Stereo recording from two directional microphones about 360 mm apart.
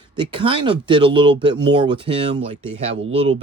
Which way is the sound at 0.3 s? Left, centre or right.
Centre.